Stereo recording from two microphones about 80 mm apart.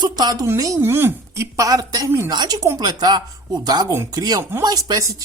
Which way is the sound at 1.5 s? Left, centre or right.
Right.